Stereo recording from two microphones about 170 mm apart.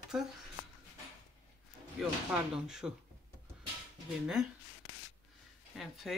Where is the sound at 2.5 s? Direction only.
5° right (ahead or behind).